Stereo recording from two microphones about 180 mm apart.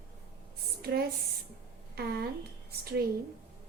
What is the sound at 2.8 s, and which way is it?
Speech, 60° right (ahead or behind).